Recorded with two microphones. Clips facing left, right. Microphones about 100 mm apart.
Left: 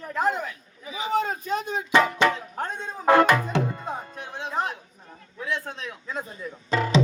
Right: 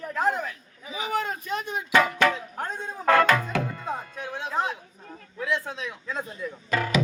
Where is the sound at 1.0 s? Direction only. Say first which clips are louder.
Left 3 dB; 25° left (ahead or behind).